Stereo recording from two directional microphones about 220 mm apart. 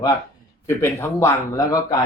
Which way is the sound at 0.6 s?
10° left (ahead or behind).